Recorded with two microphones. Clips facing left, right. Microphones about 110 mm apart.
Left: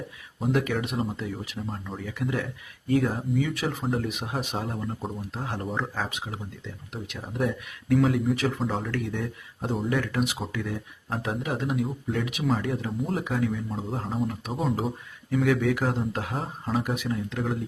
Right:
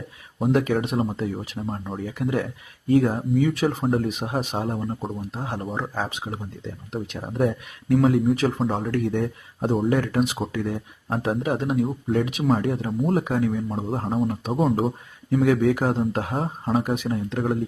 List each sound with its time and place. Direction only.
0.3 s speech: 45° right (ahead or behind)
5.5 s speech: centre (ahead or behind)
6.1 s speech: 25° right (ahead or behind)
7.3 s speech: 45° right (ahead or behind)
8.4 s speech: 35° right (ahead or behind)